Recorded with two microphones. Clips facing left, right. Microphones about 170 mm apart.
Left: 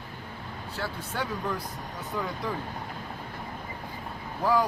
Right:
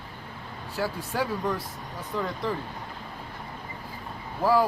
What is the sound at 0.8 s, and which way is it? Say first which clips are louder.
Speech: right 5 dB; 10° right (ahead or behind).